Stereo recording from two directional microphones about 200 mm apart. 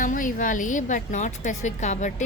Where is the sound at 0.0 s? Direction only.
40° left (ahead or behind).